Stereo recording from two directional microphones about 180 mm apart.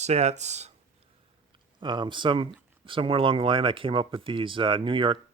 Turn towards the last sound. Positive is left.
turn(degrees=-25)  # may be behind; listen again after turning